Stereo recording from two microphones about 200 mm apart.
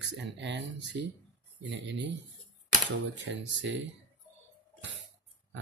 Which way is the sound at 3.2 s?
65° right (ahead or behind).